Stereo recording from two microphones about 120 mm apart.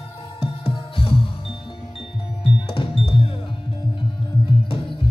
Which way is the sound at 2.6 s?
50° left (ahead or behind).